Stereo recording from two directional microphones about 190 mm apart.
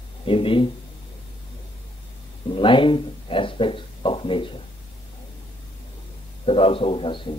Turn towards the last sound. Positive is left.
turn(degrees=25)  # may be behind; listen again after turning